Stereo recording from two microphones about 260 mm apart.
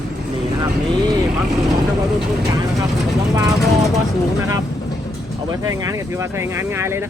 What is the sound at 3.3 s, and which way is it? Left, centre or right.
Speech, centre.